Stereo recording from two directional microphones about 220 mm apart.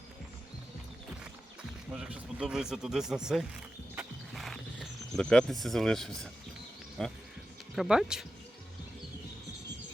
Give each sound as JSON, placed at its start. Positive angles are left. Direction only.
{"t": 1.9, "sound": "speech", "side_deg": -5}